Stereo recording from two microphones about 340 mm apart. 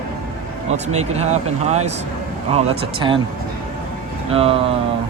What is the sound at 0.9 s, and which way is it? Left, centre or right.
Speech, centre.